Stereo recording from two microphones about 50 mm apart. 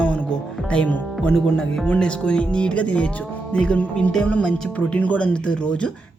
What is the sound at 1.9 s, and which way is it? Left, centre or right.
Speech, left.